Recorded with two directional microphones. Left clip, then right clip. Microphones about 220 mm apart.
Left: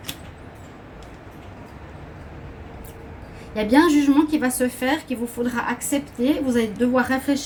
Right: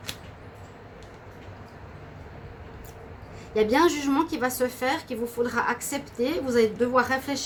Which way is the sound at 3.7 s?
45° right (ahead or behind).